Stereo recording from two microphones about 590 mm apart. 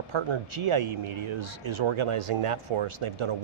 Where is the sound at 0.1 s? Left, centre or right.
Right.